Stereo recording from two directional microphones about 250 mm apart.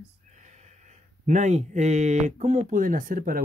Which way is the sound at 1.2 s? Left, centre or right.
Right.